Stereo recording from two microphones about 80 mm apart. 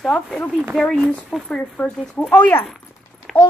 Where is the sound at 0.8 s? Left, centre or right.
Centre.